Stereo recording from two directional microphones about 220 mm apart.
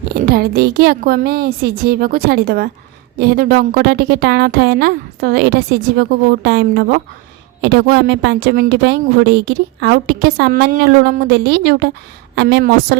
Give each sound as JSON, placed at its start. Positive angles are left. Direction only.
{"t": 0.1, "sound": "a woman's voice", "side_deg": -45}